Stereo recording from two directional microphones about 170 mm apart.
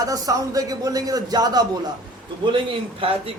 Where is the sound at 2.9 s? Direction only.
35° right (ahead or behind).